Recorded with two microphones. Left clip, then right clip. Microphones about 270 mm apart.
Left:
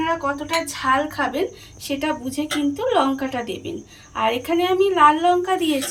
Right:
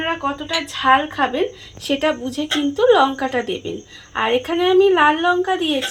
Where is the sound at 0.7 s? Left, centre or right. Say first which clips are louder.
Right 7 dB; centre.